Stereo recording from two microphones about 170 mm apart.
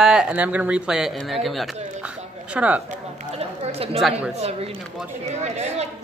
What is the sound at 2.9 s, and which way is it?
Chatter, 40° right (ahead or behind).